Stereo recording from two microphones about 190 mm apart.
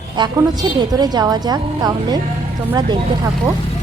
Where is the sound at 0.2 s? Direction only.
20° right (ahead or behind).